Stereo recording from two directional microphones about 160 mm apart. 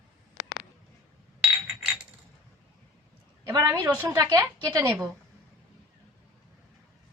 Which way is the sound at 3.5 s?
15° right (ahead or behind).